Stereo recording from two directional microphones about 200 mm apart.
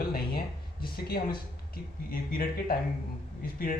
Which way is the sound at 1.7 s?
45° left (ahead or behind).